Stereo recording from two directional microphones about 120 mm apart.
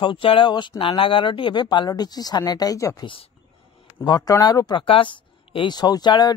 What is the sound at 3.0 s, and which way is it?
Speech, 45° left (ahead or behind).